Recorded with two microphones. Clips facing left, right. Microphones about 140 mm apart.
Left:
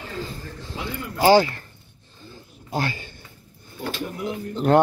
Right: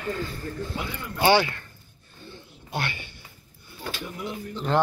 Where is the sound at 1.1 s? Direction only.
35° left (ahead or behind).